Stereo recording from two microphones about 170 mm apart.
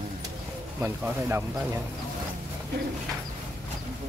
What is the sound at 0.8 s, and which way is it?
Speech, 15° right (ahead or behind).